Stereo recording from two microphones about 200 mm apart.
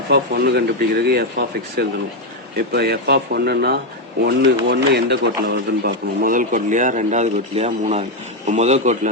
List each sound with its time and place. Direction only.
0.1 s a man's voice: 55° right (ahead or behind)
6.2 s a man's voice: 40° right (ahead or behind)